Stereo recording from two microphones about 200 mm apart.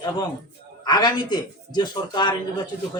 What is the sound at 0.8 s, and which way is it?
A man's voice, 20° left (ahead or behind).